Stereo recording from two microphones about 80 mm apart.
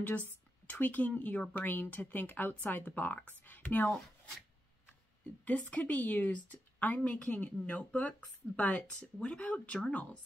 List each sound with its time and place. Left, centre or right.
0.0 s a woman's voice: left
5.2 s speech: centre